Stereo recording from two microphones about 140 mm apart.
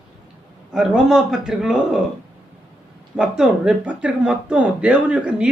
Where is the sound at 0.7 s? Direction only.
5° right (ahead or behind).